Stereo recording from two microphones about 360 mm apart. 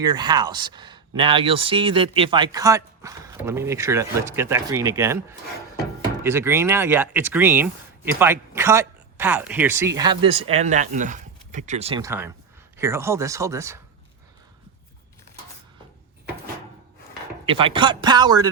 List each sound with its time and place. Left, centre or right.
0.0 s speech: centre
17.4 s speech: centre